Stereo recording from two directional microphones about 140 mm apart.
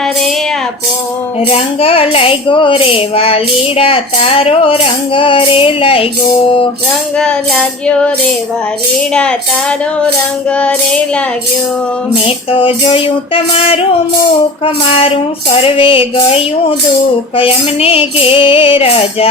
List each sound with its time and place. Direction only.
1.5 s child singing: 45° left (ahead or behind)
7.2 s music: 5° left (ahead or behind)
9.1 s music: 5° left (ahead or behind)
12.1 s a sound: 40° left (ahead or behind)
14.6 s child singing: 45° left (ahead or behind)
17.3 s a sound: 40° left (ahead or behind)